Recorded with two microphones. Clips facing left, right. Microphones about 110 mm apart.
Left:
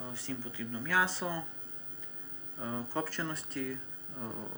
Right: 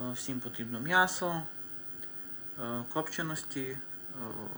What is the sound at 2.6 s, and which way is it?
Speech, 10° right (ahead or behind).